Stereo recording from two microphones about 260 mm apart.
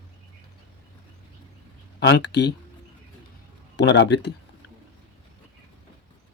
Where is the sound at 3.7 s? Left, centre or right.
Left.